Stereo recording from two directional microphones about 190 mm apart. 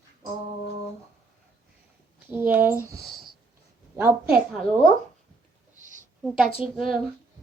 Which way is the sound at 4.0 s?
10° right (ahead or behind).